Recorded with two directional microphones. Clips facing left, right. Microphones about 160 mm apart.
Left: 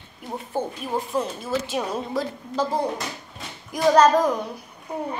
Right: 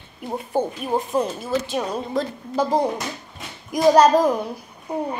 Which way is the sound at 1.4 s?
5° left (ahead or behind).